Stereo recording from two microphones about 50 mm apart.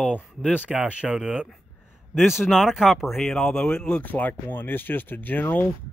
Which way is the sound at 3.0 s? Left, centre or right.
Centre.